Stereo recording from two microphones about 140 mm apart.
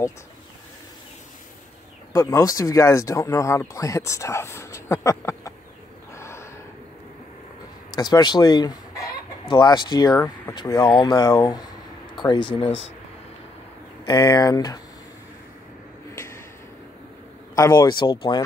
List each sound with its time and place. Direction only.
2.1 s speech: 25° left (ahead or behind)
6.1 s gasp: 20° left (ahead or behind)
7.9 s speech: 30° left (ahead or behind)
14.0 s speech: 30° left (ahead or behind)
17.6 s speech: 25° left (ahead or behind)